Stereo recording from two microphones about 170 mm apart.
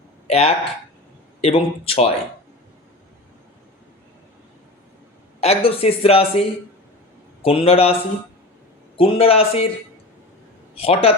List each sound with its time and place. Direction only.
0.3 s speech: 35° left (ahead or behind)
5.4 s speech: 35° left (ahead or behind)
9.0 s speech: 35° left (ahead or behind)
10.8 s speech: 35° left (ahead or behind)